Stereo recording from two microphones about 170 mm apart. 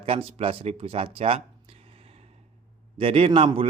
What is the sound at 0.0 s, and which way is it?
Speech, 35° right (ahead or behind).